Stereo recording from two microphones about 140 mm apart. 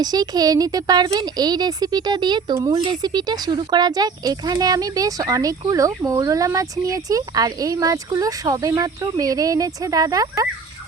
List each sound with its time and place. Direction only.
0.0 s speech: 30° right (ahead or behind)